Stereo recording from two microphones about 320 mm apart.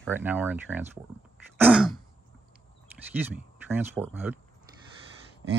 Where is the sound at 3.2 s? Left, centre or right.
Centre.